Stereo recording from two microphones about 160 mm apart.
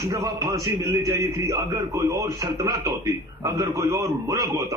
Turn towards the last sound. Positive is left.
turn(degrees=-20)  # may be behind; listen again after turning